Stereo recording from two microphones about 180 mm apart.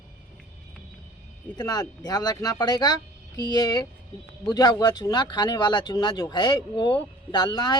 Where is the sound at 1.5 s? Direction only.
20° left (ahead or behind).